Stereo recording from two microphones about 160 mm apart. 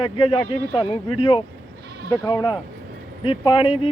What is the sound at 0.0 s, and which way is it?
Speech, 35° left (ahead or behind).